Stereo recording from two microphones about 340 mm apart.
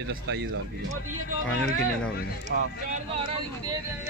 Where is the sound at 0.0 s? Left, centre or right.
Right.